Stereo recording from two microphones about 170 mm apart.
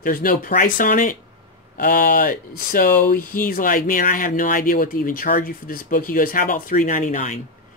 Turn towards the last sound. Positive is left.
turn(degrees=45)  # may be behind; listen again after turning